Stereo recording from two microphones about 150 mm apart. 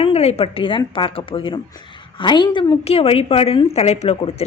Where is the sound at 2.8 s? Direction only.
40° left (ahead or behind).